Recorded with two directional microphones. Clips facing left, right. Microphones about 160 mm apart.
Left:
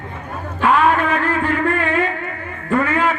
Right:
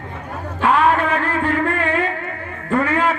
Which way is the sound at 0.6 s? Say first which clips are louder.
Left 1 dB; 30° right (ahead or behind).